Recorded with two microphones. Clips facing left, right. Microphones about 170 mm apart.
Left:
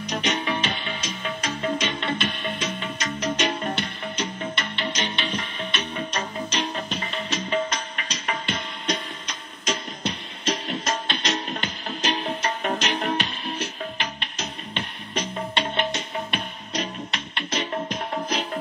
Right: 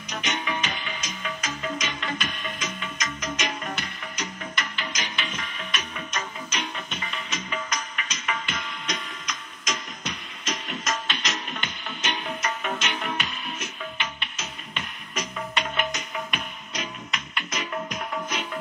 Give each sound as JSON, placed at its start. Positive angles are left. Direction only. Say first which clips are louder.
{"t": 0.1, "sound": "music", "louder": "left 4 dB", "side_deg": 30}